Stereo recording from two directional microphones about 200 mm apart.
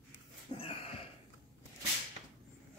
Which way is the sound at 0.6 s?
30° left (ahead or behind).